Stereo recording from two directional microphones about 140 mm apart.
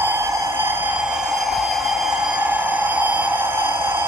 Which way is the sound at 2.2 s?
10° right (ahead or behind).